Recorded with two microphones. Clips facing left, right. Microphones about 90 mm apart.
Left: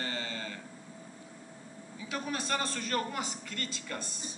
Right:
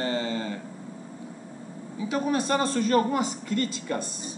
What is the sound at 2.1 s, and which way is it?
A man's voice, 25° right (ahead or behind).